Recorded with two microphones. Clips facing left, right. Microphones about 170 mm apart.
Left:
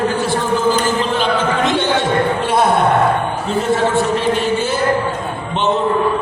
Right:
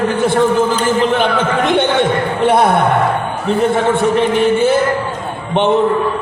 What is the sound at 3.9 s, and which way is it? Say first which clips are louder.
Speech: right 3 dB; 60° right (ahead or behind).